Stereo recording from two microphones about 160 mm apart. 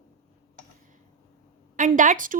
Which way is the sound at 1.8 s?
55° right (ahead or behind).